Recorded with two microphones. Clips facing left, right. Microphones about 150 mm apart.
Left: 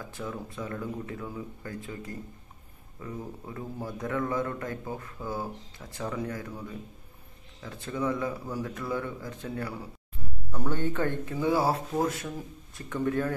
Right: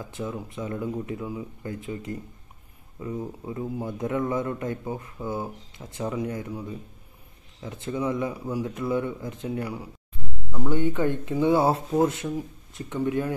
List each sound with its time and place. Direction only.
0.0 s a man's voice: 20° right (ahead or behind)